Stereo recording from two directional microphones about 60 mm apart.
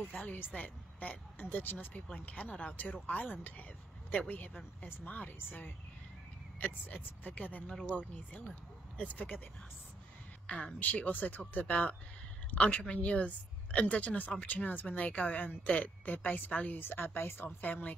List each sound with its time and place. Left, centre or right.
0.1 s a woman's voice: left
2.0 s a woman's voice: centre
10.4 s a woman's voice: centre